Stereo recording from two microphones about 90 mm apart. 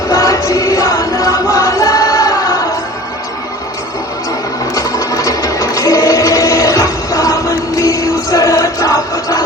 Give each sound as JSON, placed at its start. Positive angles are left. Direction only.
{"t": 0.1, "sound": "music", "side_deg": 40}
{"t": 4.7, "sound": "sewing machine", "side_deg": 40}